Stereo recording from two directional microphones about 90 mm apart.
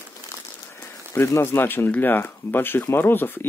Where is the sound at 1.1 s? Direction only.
30° left (ahead or behind).